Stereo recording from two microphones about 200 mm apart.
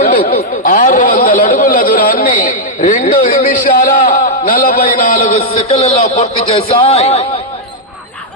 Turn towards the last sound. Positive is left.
turn(degrees=30)  # may be behind; listen again after turning